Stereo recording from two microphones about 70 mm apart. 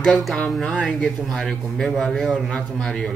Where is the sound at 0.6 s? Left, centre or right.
Centre.